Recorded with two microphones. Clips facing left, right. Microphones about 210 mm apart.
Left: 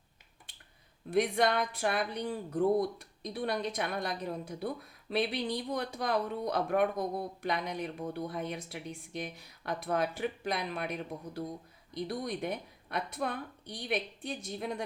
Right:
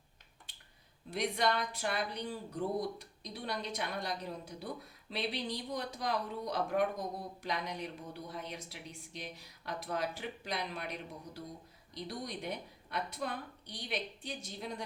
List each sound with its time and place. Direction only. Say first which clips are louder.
1.1 s speech: left 5 dB; 55° left (ahead or behind)
11.9 s speech: left 6 dB; 55° left (ahead or behind)